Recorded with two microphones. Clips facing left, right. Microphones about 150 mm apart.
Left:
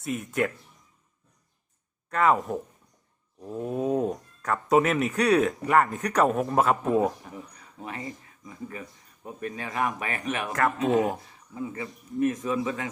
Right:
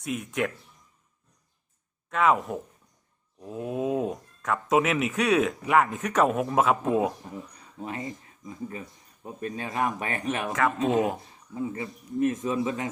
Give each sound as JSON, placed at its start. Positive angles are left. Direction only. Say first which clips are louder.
{"t": 0.0, "sound": "speech", "louder": "left 1 dB", "side_deg": 0}
{"t": 2.0, "sound": "speech", "louder": "even", "side_deg": 0}
{"t": 7.8, "sound": "a man's voice", "louder": "right 2 dB", "side_deg": -25}